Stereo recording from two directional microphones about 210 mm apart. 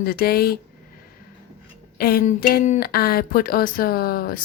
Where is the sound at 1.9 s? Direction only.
45° left (ahead or behind).